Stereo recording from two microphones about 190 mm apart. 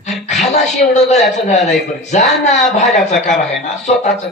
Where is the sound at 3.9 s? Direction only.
35° left (ahead or behind).